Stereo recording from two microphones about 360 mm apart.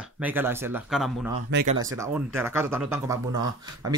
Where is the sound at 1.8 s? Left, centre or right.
Centre.